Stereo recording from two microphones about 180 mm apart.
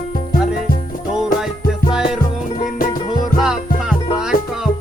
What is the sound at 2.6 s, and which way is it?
Music, 50° left (ahead or behind).